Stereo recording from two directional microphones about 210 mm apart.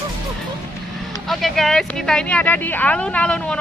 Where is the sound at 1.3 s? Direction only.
Centre (ahead or behind).